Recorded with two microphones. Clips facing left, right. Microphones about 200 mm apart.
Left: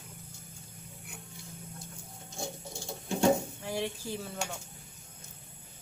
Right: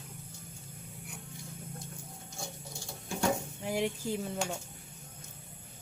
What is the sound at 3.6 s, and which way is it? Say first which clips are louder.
Speech: right 3 dB; 20° right (ahead or behind).